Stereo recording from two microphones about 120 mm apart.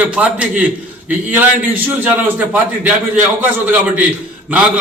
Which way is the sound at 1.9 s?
15° right (ahead or behind).